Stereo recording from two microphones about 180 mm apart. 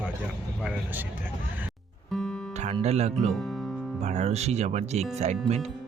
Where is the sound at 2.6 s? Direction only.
35° right (ahead or behind).